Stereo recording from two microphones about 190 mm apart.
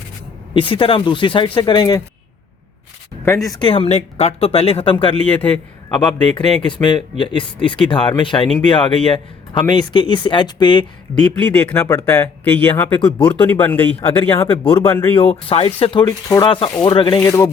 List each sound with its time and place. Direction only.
0.5 s speech: 25° left (ahead or behind)
3.2 s speech: 15° left (ahead or behind)
3.7 s speech: 30° left (ahead or behind)
5.2 s speech: 10° left (ahead or behind)
6.1 s speech: 25° left (ahead or behind)
11.1 s speech: 5° left (ahead or behind)
14.4 s speech: 30° left (ahead or behind)
14.8 s speech: 10° left (ahead or behind)
15.1 s speech: 30° left (ahead or behind)